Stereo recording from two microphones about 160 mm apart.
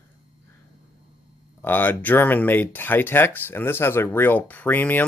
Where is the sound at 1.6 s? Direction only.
10° left (ahead or behind).